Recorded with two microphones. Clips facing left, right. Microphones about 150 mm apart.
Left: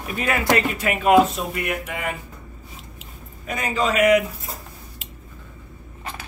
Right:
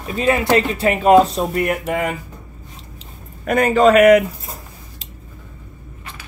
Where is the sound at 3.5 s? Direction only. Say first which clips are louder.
Right 11 dB; 55° right (ahead or behind).